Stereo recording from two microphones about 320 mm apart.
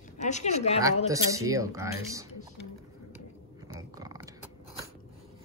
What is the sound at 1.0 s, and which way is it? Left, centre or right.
Speech, centre.